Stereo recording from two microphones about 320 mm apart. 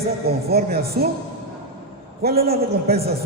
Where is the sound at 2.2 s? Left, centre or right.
Right.